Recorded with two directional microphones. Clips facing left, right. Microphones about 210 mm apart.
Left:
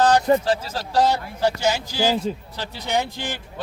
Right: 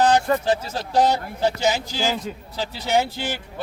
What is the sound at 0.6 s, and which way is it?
Speech, 20° right (ahead or behind).